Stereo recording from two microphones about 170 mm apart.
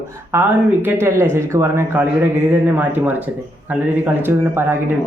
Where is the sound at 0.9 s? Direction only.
15° right (ahead or behind).